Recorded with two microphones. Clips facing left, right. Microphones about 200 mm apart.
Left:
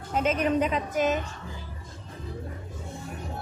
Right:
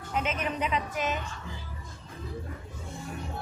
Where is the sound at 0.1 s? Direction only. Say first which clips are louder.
Left 7 dB; 40° left (ahead or behind).